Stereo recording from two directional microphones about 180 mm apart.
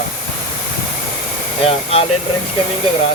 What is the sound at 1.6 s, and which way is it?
Speech, 35° left (ahead or behind).